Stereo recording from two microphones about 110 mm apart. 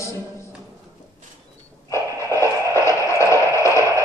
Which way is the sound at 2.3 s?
25° left (ahead or behind).